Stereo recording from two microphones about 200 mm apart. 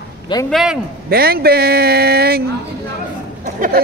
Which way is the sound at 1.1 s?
50° right (ahead or behind).